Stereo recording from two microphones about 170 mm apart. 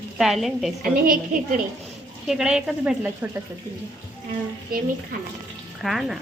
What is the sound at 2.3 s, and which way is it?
Dishes, 5° right (ahead or behind).